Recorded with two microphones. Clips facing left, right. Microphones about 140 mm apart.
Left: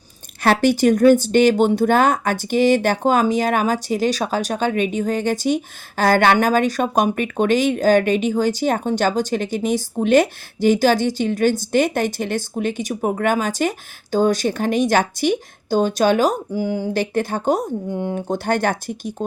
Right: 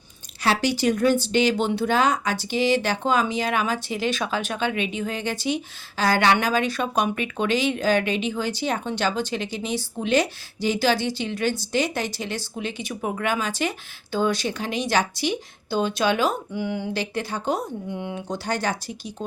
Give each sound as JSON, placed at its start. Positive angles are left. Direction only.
{"t": 0.4, "sound": "speech", "side_deg": 50}